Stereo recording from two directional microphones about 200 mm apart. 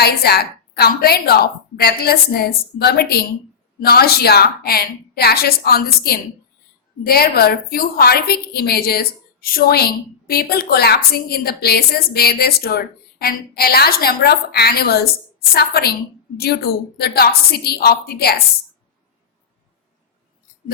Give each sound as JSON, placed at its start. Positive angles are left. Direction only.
{"t": 0.0, "sound": "a woman's voice", "side_deg": 50}